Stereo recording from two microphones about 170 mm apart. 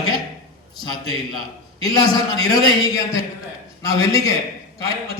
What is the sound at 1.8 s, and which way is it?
A man's voice, 20° left (ahead or behind).